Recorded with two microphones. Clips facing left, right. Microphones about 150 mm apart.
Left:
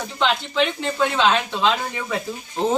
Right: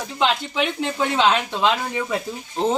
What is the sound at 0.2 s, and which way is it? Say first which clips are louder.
Speech: left 1 dB; 10° right (ahead or behind).